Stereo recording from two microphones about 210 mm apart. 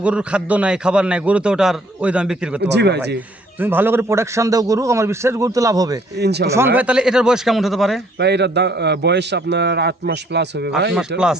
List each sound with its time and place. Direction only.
0.0 s a man's voice: 5° right (ahead or behind)
2.6 s a man's voice: 55° right (ahead or behind)
3.6 s a man's voice: 10° right (ahead or behind)
6.1 s a man's voice: 50° right (ahead or behind)
6.7 s a man's voice: 5° right (ahead or behind)
8.2 s a man's voice: 55° right (ahead or behind)